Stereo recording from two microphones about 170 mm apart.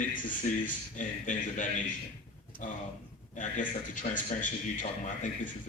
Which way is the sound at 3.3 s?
50° left (ahead or behind).